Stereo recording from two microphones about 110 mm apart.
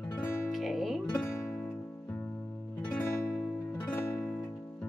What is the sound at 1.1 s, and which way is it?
Music, 15° left (ahead or behind).